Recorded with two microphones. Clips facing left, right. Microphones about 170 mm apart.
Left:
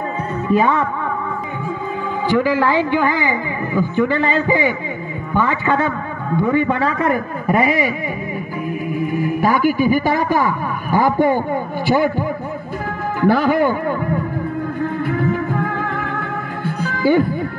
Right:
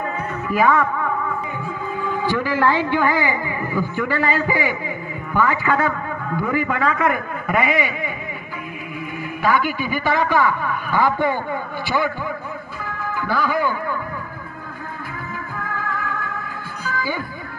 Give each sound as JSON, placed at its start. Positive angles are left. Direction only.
{"t": 0.5, "sound": "a man's voice", "side_deg": 25}
{"t": 2.2, "sound": "a man's voice", "side_deg": 15}
{"t": 9.0, "sound": "speech", "side_deg": 45}
{"t": 15.0, "sound": "music", "side_deg": 65}